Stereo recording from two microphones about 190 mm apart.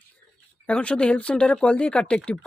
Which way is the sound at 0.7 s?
5° left (ahead or behind).